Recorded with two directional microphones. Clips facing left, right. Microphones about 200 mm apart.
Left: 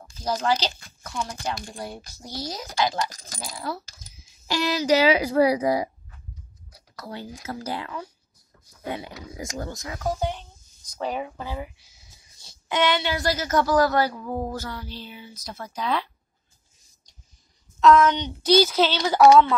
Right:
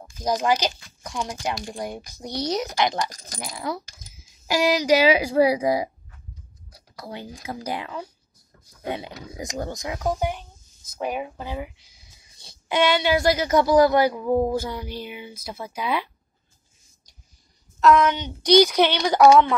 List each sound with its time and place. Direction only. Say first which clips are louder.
0.2 s speech: right 2 dB; 15° right (ahead or behind)
7.0 s speech: even; 15° right (ahead or behind)
12.9 s speech: right 5 dB; 10° right (ahead or behind)
17.9 s speech: left 1 dB; 10° right (ahead or behind)